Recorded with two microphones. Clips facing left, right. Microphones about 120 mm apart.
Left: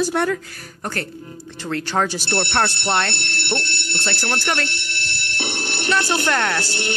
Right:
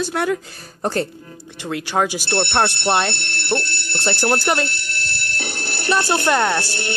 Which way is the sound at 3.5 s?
25° left (ahead or behind).